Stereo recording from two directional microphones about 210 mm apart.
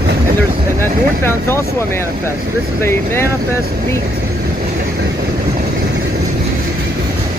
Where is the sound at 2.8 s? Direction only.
10° left (ahead or behind).